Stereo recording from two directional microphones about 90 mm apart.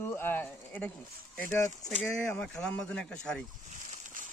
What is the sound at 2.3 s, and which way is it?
Speech, 10° left (ahead or behind).